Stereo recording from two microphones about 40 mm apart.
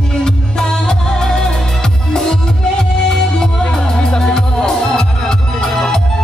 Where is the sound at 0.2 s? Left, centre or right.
Centre.